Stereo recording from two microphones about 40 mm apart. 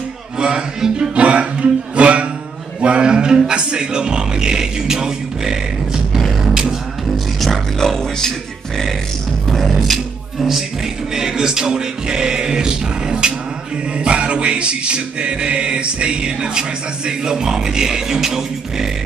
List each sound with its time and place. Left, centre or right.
0.4 s speech: centre
1.1 s music: right; by 5.6 s centre
7.3 s speech: centre
9.5 s music: centre
11.1 s music: centre